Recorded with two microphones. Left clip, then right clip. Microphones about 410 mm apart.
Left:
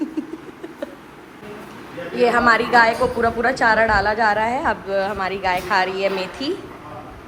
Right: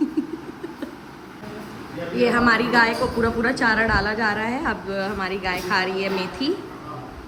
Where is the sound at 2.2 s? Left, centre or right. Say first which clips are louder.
Left 3 dB; centre.